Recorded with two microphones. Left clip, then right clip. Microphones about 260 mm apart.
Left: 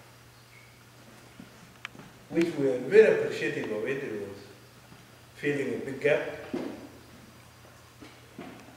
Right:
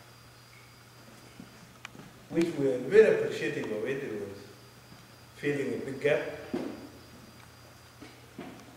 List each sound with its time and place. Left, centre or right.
2.3 s a man's voice: centre
5.4 s a man's voice: centre
5.7 s a man's voice: left
5.9 s a man's voice: centre
8.4 s a sound: centre